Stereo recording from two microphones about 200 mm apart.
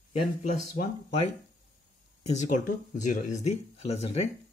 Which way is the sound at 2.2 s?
40° left (ahead or behind).